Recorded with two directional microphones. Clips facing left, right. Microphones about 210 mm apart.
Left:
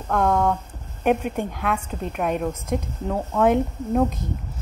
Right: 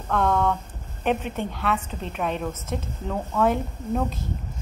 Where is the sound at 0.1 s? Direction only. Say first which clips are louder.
Left 2 dB; 10° left (ahead or behind).